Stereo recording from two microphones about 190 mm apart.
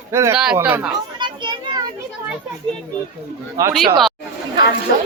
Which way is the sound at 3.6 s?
15° right (ahead or behind).